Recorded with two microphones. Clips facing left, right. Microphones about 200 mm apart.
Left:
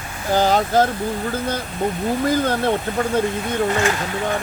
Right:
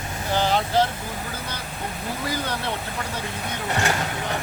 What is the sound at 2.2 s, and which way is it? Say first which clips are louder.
Speech: left 9 dB; 50° left (ahead or behind).